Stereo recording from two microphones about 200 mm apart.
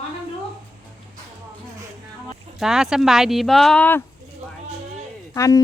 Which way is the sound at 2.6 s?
Centre (ahead or behind).